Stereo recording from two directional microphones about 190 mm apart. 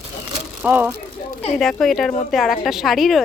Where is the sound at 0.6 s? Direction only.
10° right (ahead or behind).